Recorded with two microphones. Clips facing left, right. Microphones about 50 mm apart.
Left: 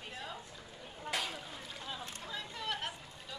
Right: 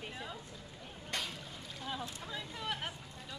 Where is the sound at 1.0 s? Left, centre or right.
Centre.